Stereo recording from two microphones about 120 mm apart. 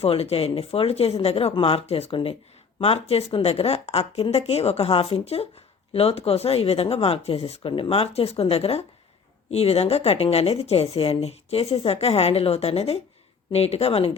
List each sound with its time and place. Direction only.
0.0 s speech: 60° left (ahead or behind)